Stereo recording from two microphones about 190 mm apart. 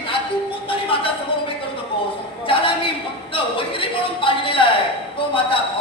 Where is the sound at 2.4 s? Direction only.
25° left (ahead or behind).